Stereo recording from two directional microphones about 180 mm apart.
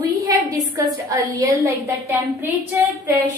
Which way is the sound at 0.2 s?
20° right (ahead or behind).